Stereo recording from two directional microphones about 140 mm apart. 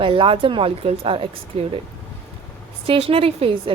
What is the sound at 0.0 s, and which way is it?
Speech, 40° right (ahead or behind).